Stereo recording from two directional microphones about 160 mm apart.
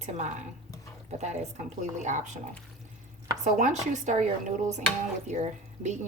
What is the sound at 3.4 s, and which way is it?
A woman's voice, 50° right (ahead or behind).